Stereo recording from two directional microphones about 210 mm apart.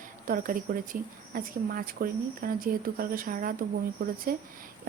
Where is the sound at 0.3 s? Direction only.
40° right (ahead or behind).